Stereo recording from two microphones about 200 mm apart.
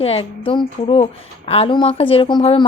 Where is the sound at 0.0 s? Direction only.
30° left (ahead or behind).